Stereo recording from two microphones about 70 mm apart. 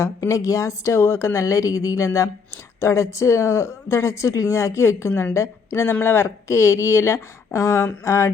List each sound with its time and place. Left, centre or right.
0.0 s speech: left